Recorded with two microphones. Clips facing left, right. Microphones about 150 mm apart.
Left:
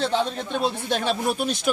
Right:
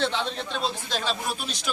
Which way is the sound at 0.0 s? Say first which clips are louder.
Left 4 dB; 40° left (ahead or behind).